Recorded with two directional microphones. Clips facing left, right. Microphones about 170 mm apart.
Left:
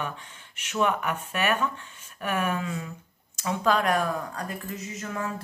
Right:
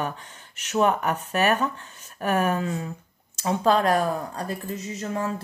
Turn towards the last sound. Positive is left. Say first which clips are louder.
# right 4 dB
turn(degrees=-30)  # may be behind; listen again after turning